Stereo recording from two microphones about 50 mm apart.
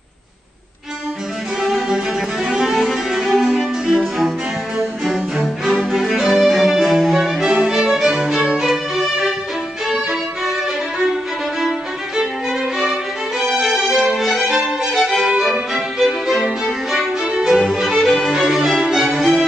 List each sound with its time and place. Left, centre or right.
1.6 s music: centre
1.9 s music: centre
7.6 s music: centre
12.7 s music: centre